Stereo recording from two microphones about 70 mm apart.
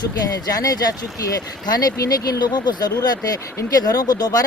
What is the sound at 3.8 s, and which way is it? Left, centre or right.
Speech, left.